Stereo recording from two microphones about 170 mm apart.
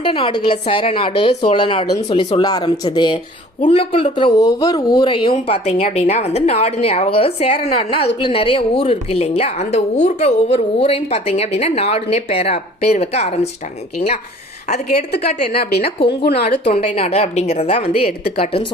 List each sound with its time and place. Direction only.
0.0 s speech: 30° left (ahead or behind)
15.1 s speech: 70° left (ahead or behind)
16.6 s speech: 35° left (ahead or behind)